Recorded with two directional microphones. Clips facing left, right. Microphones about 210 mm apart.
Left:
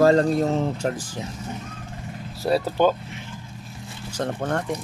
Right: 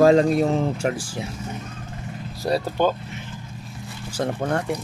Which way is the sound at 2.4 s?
5° left (ahead or behind).